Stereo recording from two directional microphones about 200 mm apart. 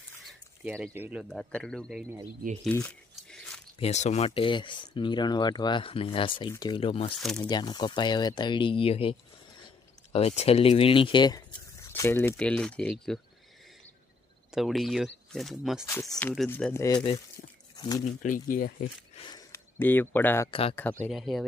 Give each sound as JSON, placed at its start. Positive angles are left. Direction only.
{"t": 0.3, "sound": "speech", "side_deg": -5}
{"t": 2.6, "sound": "a sound", "side_deg": 5}
{"t": 3.8, "sound": "speech", "side_deg": 35}
{"t": 14.5, "sound": "speech", "side_deg": 0}
{"t": 15.9, "sound": "speech", "side_deg": 15}
{"t": 16.8, "sound": "speech", "side_deg": 20}
{"t": 18.0, "sound": "speech", "side_deg": 40}
{"t": 19.2, "sound": "speech", "side_deg": 20}
{"t": 20.5, "sound": "speech", "side_deg": 30}
{"t": 21.0, "sound": "speech", "side_deg": 0}